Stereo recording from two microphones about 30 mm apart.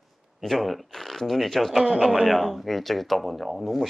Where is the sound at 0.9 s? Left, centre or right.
Centre.